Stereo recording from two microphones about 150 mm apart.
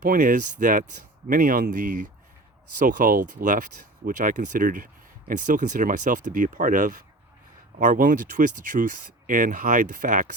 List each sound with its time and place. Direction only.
0.0 s speech: 65° right (ahead or behind)
1.3 s speech: 70° right (ahead or behind)
2.7 s speech: 60° right (ahead or behind)